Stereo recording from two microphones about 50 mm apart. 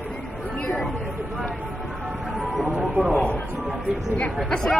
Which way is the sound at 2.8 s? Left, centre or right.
Centre.